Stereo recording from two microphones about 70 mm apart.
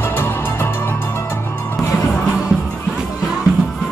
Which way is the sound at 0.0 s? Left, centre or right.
Left.